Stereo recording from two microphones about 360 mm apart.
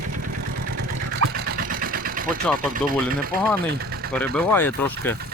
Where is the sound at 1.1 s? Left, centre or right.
Right.